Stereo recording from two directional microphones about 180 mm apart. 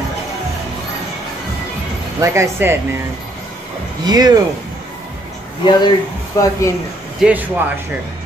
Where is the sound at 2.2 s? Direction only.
15° right (ahead or behind).